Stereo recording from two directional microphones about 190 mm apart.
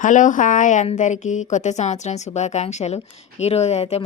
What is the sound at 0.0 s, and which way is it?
A woman's voice, 40° left (ahead or behind).